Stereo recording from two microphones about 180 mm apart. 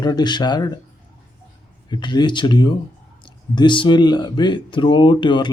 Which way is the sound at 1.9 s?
25° left (ahead or behind).